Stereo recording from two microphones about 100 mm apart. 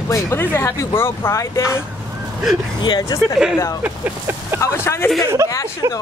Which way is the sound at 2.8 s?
45° left (ahead or behind).